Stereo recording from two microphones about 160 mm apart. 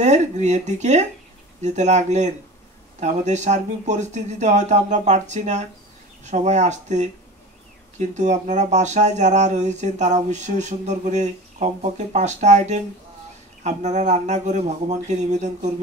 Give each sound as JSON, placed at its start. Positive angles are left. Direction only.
{"t": 0.0, "sound": "speech", "side_deg": -45}
{"t": 8.1, "sound": "speech", "side_deg": -50}